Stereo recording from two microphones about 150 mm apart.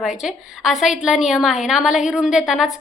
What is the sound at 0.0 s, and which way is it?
A woman's voice, centre (ahead or behind).